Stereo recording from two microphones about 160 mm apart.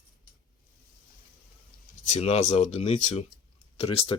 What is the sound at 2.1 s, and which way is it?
Speech, 45° left (ahead or behind).